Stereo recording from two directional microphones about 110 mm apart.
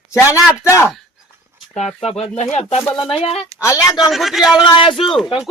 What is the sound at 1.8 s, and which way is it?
Speech, 80° left.